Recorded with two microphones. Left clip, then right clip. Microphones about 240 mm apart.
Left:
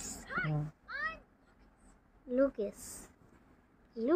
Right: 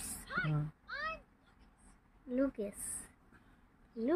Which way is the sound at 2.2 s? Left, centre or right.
Centre.